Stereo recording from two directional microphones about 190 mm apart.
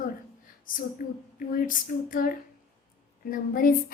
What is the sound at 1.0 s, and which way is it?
A woman's voice, 45° left (ahead or behind).